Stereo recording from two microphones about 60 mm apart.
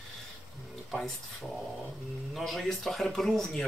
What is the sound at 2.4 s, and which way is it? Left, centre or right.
Speech, centre.